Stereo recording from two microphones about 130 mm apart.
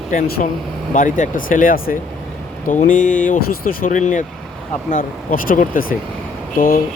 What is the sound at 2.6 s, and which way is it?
Speech, 80° left.